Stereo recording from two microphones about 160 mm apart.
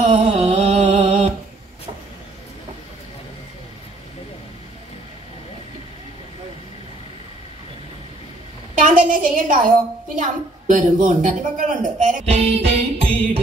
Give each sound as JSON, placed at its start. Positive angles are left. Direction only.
{"t": 0.0, "sound": "mantra", "side_deg": -45}
{"t": 8.7, "sound": "a woman's voice", "side_deg": -55}